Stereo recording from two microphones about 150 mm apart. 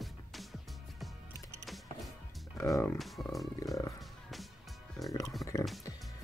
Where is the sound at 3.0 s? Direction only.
Centre (ahead or behind).